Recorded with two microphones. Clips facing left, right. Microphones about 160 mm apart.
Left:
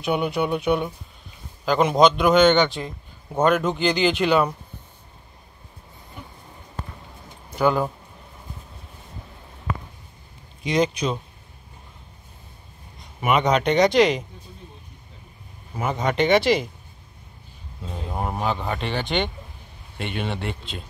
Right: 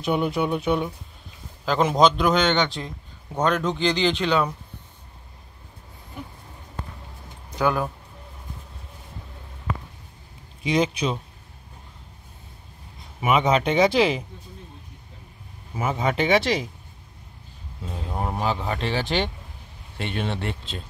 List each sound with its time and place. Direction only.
0.0 s a man's voice: centre (ahead or behind)
7.5 s speech: 15° left (ahead or behind)
10.6 s a man's voice: 5° right (ahead or behind)
13.3 s a man's voice: 5° right (ahead or behind)
15.9 s a man's voice: 5° right (ahead or behind)
18.3 s a man's voice: centre (ahead or behind)